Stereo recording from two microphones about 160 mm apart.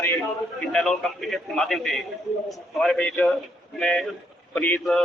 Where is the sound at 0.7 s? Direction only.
5° left (ahead or behind).